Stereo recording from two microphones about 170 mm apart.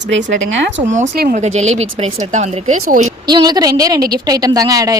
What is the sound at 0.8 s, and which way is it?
Speech, 45° right (ahead or behind).